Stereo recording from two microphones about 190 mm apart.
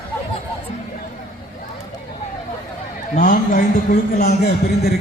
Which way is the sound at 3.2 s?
50° left (ahead or behind).